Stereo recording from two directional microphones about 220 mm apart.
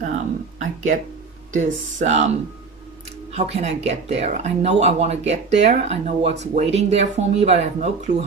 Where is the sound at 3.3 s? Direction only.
30° right (ahead or behind).